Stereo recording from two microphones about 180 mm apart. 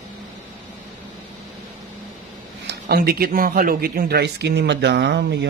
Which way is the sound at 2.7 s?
60° right (ahead or behind).